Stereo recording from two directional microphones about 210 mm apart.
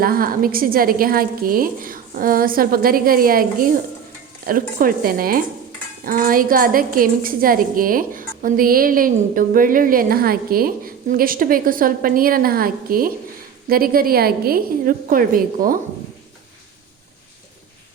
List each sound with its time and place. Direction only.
0.0 s a woman's voice: 45° right (ahead or behind)